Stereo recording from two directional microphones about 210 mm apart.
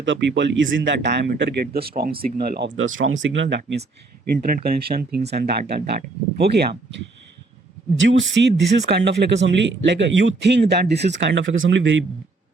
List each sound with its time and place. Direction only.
0.0 s speech: 60° right (ahead or behind)
4.4 s speech: 45° right (ahead or behind)
7.9 s speech: 65° right (ahead or behind)